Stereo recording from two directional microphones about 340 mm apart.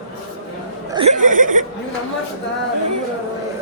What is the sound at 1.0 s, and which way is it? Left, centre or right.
Chuckle, right.